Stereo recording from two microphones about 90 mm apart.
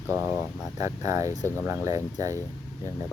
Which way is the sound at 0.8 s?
40° right (ahead or behind).